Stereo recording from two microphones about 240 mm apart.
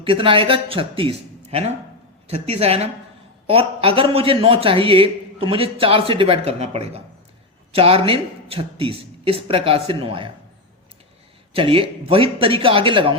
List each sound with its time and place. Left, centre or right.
0.0 s a man's voice: right
11.5 s a man's voice: right